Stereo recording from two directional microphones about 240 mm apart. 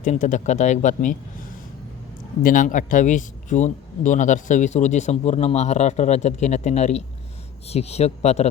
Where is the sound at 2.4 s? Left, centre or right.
Left.